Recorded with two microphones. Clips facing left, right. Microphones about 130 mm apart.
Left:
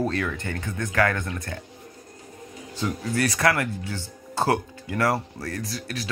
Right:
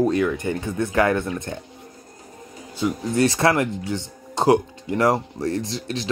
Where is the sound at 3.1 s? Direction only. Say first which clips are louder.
Right 4 dB; 25° right (ahead or behind).